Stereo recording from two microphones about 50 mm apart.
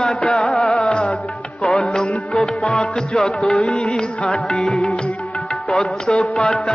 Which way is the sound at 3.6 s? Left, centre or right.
Centre.